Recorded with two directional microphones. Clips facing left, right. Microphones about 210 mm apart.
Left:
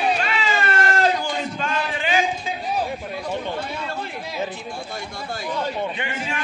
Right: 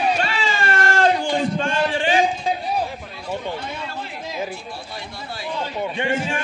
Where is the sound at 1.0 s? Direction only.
30° right (ahead or behind).